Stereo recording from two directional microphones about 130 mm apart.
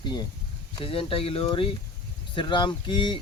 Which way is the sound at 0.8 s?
45° left (ahead or behind).